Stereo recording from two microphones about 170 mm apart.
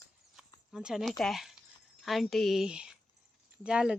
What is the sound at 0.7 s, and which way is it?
Speech, 5° right (ahead or behind).